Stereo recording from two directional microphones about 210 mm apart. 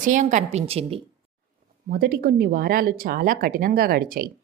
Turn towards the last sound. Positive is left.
turn(degrees=-45)  # may be behind; listen again after turning